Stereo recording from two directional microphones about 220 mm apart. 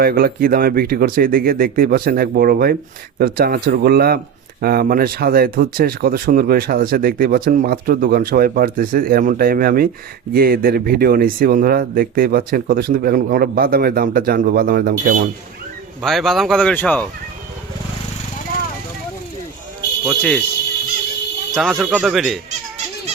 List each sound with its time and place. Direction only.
0.0 s speech: 45° right (ahead or behind)
16.0 s speech: centre (ahead or behind)
20.1 s speech: centre (ahead or behind)
21.5 s speech: centre (ahead or behind)